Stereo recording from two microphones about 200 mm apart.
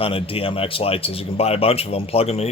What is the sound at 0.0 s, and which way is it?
A man's voice, 25° left (ahead or behind).